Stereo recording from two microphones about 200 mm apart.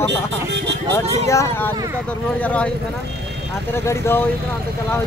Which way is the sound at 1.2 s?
15° left (ahead or behind).